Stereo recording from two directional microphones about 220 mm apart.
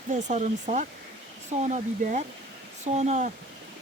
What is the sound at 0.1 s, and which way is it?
Speech, 35° right (ahead or behind).